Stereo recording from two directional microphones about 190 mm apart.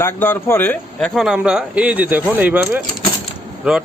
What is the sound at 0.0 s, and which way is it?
Speech, 10° left (ahead or behind).